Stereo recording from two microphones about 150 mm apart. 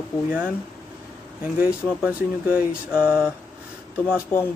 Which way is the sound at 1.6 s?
10° right (ahead or behind).